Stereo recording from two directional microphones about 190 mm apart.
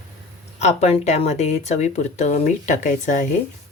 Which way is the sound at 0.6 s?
35° left (ahead or behind).